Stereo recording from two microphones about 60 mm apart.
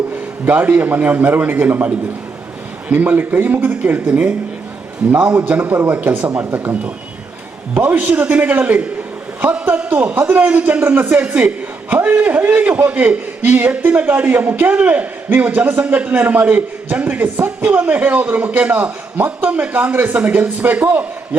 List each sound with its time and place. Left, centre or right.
0.4 s a man's voice: right
2.9 s a man's voice: right
6.4 s a man's voice: right
19.5 s a man's voice: right